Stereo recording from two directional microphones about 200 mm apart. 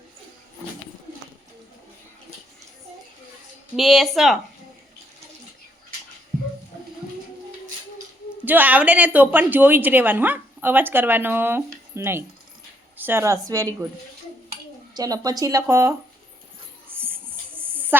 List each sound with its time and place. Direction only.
3.8 s speech: centre (ahead or behind)
8.4 s a woman's voice: 10° right (ahead or behind)
14.9 s a woman's voice: 20° right (ahead or behind)
16.9 s music: 10° right (ahead or behind)